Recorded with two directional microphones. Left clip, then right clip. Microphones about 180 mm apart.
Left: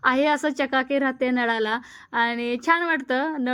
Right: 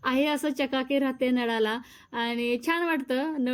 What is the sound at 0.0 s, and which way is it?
A woman's voice, 5° left (ahead or behind).